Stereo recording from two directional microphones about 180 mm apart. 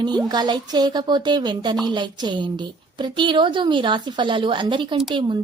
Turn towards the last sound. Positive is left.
turn(degrees=-25)  # may be behind; listen again after turning